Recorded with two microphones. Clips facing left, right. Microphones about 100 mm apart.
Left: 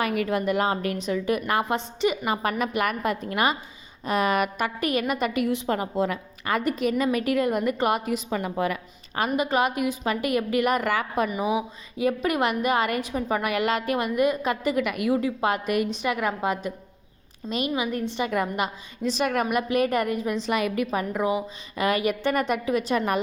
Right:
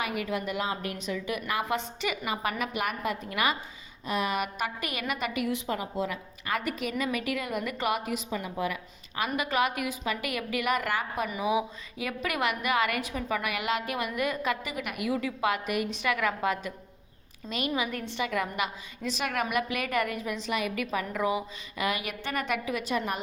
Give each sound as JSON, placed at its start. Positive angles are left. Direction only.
{"t": 0.0, "sound": "a woman's voice", "side_deg": 45}
{"t": 1.7, "sound": "a woman's voice", "side_deg": 30}
{"t": 2.2, "sound": "a woman's voice", "side_deg": 45}
{"t": 5.6, "sound": "a woman's voice", "side_deg": 55}
{"t": 6.6, "sound": "a woman's voice", "side_deg": 35}
{"t": 8.3, "sound": "a woman's voice", "side_deg": 60}
{"t": 9.3, "sound": "a woman's voice", "side_deg": 25}
{"t": 10.0, "sound": "a woman's voice", "side_deg": 35}
{"t": 15.9, "sound": "a woman's voice", "side_deg": 25}
{"t": 18.2, "sound": "a woman's voice", "side_deg": 35}
{"t": 20.5, "sound": "a woman's voice", "side_deg": 50}
{"t": 20.7, "sound": "a woman's voice", "side_deg": 30}
{"t": 21.8, "sound": "a woman's voice", "side_deg": 40}
{"t": 23.0, "sound": "a woman's voice", "side_deg": 55}